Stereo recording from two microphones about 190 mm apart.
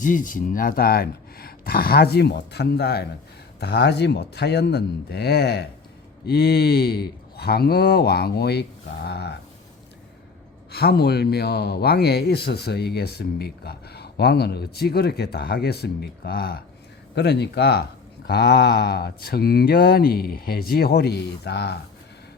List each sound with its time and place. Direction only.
0.0 s speech: 45° left (ahead or behind); by 9.4 s 60° left (ahead or behind)
10.7 s speech: 55° left (ahead or behind)